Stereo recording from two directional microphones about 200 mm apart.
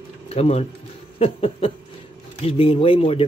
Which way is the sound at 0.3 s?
30° left (ahead or behind).